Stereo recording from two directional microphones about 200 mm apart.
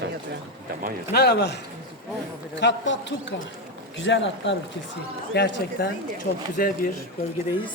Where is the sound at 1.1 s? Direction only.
50° left (ahead or behind).